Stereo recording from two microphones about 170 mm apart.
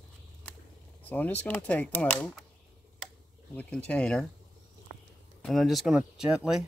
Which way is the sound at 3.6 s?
5° left (ahead or behind).